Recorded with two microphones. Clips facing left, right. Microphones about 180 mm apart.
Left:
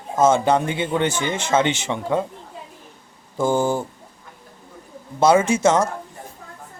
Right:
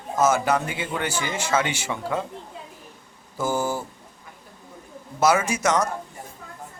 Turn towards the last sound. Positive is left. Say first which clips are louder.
# left 5 dB
turn(degrees=25)  # may be behind; listen again after turning